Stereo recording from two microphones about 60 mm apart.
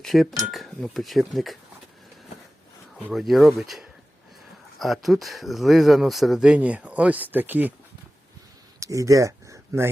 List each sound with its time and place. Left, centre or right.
0.0 s speech: centre
3.1 s speech: centre
6.6 s speech: right
8.8 s a sound: right